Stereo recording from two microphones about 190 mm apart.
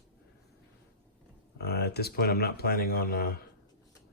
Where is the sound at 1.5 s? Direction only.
55° left (ahead or behind).